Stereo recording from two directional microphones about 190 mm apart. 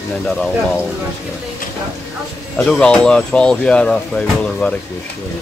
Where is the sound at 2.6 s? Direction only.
5° left (ahead or behind).